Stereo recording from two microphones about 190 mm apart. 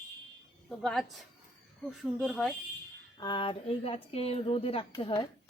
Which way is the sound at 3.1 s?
25° left (ahead or behind).